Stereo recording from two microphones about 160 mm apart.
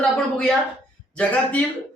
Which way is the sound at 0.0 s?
5° left (ahead or behind).